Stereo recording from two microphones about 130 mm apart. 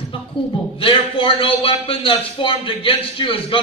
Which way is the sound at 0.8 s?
40° left (ahead or behind).